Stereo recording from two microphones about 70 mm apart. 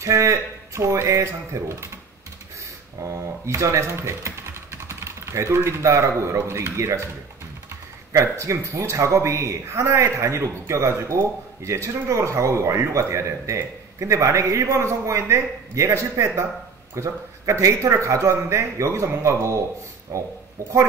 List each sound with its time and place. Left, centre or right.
0.0 s speech: right
3.0 s speech: right
8.1 s speech: right